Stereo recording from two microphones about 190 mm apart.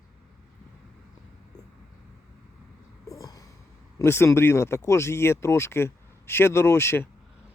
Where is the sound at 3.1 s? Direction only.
20° left (ahead or behind).